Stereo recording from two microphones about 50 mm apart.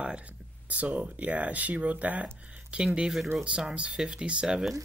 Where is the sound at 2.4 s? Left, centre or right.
Right.